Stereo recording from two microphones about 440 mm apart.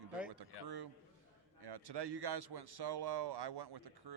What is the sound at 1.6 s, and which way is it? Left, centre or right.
Speech, right.